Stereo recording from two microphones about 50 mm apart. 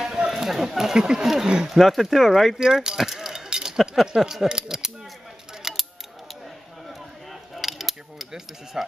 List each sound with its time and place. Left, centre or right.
0.0 s a sound: centre
0.9 s speech: centre
1.7 s speech: centre
2.6 s keys jangling: centre
3.8 s speech: centre
5.6 s a sound: centre
7.5 s mechanisms: centre